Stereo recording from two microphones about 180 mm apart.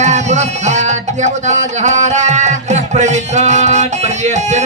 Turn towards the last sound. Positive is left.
turn(degrees=-40)  # may be behind; listen again after turning